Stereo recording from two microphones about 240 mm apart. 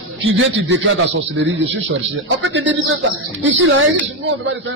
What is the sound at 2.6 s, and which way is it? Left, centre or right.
Speech, right.